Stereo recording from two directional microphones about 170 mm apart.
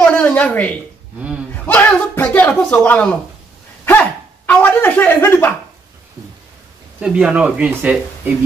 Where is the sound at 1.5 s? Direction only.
10° left (ahead or behind).